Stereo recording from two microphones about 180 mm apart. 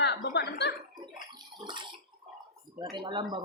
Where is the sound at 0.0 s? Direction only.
70° left (ahead or behind).